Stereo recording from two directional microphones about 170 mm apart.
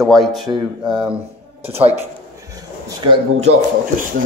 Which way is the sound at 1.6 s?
35° right (ahead or behind).